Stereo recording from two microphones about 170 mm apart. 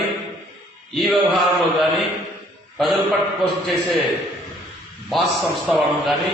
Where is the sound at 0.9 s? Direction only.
Centre (ahead or behind).